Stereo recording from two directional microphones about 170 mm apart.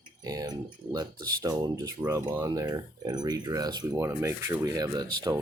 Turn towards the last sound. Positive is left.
turn(degrees=-20)  # may be behind; listen again after turning